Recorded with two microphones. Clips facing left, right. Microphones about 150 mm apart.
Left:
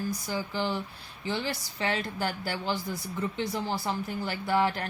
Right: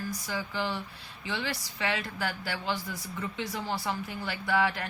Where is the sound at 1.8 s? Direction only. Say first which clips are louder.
Left 2 dB; 35° left (ahead or behind).